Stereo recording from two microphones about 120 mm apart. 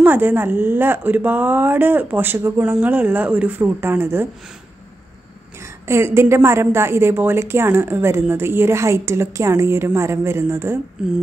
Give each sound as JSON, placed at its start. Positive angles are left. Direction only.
{"t": 0.0, "sound": "speech", "side_deg": -15}
{"t": 5.9, "sound": "a woman's voice", "side_deg": -20}